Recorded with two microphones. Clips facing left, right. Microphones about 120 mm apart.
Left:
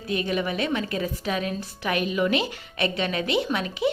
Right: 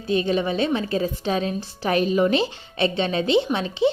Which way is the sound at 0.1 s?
30° right (ahead or behind).